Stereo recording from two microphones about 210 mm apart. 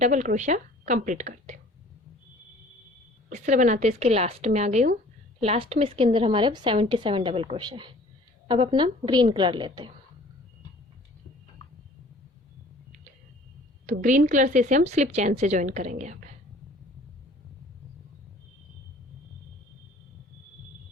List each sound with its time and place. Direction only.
0.0 s a woman's voice: 35° right (ahead or behind)
3.2 s a woman's voice: 35° right (ahead or behind)
13.8 s a woman's voice: 40° right (ahead or behind)